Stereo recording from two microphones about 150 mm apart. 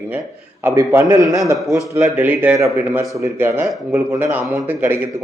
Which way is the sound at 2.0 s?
10° right (ahead or behind).